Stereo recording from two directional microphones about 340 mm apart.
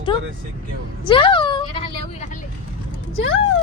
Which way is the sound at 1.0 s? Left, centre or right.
Centre.